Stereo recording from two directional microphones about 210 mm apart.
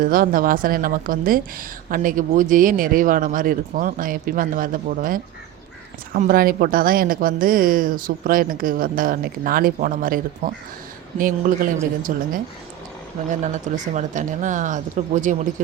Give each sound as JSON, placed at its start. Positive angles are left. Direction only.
{"t": 0.0, "sound": "a woman's voice", "side_deg": -40}
{"t": 13.4, "sound": "a woman's voice", "side_deg": -35}